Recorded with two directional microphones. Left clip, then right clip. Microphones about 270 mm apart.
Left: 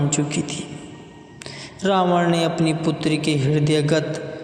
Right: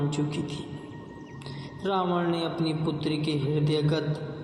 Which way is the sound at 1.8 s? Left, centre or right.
Left.